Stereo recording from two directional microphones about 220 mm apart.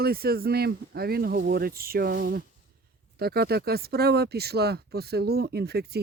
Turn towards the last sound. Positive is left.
turn(degrees=-45)  # may be behind; listen again after turning